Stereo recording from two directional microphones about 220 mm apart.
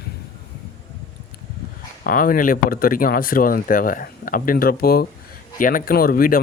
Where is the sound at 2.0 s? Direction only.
40° left (ahead or behind).